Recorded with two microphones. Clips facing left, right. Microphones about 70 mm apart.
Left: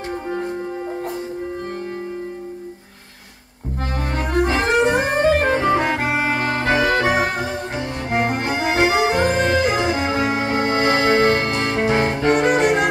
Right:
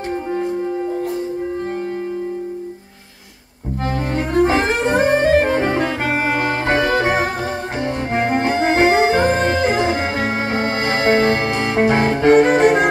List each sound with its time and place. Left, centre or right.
4.1 s music: right
6.1 s organ: right
8.1 s music: right
10.6 s music: left
11.0 s music: right